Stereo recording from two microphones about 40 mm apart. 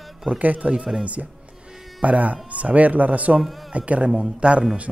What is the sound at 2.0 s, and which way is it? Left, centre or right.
Speech, right.